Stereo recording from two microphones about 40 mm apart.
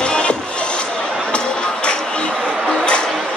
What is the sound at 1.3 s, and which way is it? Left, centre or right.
Music, left.